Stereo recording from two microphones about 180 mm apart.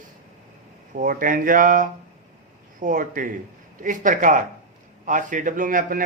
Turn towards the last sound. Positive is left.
turn(degrees=-50)  # may be behind; listen again after turning